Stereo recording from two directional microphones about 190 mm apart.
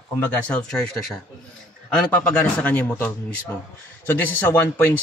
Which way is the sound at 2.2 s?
10° left (ahead or behind).